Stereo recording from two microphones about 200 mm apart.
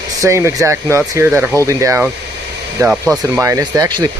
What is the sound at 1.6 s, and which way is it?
Speech, 15° right (ahead or behind).